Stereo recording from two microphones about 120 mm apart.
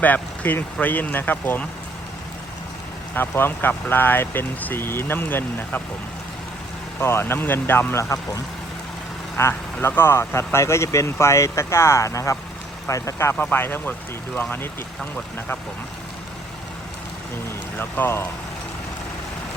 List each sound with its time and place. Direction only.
0.0 s speech: 15° left (ahead or behind)
3.2 s speech: 15° left (ahead or behind)
7.0 s speech: 20° left (ahead or behind)
9.4 s speech: 20° left (ahead or behind)
17.7 s speech: 15° left (ahead or behind)